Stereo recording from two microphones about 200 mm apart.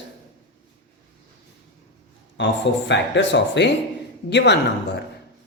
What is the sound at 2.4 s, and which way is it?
Speech, 70° left (ahead or behind).